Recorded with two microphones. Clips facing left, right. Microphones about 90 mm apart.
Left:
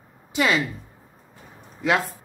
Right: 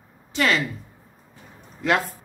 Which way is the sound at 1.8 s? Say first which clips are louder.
Even; 5° left (ahead or behind).